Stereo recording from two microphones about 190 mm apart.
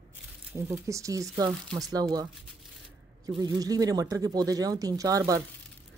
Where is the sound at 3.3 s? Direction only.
20° right (ahead or behind).